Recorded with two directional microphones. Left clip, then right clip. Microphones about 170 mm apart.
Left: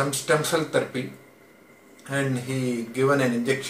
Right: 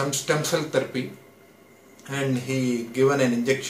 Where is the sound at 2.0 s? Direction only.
15° right (ahead or behind).